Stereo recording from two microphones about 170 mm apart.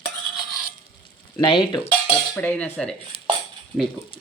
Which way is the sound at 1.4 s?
25° left (ahead or behind).